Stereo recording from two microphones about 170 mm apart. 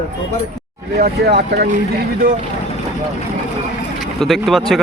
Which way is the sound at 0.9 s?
70° right (ahead or behind).